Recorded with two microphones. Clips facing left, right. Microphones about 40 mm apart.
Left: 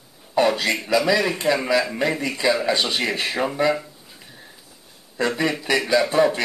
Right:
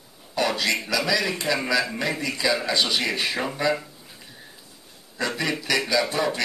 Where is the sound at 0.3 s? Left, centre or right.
Left.